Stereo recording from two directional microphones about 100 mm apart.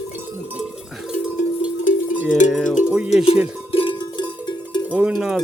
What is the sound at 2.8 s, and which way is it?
Music, 10° right (ahead or behind).